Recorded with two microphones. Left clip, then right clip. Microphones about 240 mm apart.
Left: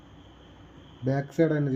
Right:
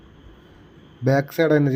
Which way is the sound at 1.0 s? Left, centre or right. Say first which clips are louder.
Right 6 dB; right.